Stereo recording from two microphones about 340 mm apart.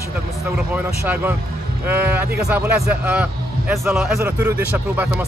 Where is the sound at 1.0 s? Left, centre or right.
Centre.